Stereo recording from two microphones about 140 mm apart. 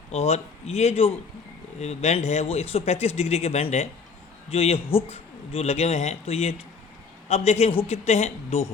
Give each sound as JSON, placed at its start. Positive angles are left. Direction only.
{"t": 0.1, "sound": "a man's voice", "side_deg": 50}